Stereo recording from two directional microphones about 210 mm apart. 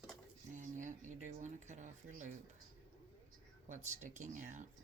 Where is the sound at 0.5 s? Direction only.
35° right (ahead or behind).